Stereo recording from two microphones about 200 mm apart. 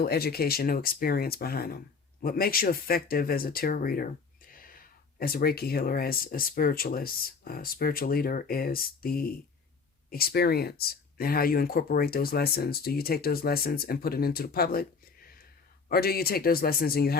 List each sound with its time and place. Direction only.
0.0 s speech: 50° left (ahead or behind)